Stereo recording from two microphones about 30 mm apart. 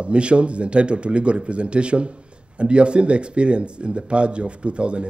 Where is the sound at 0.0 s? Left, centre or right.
Right.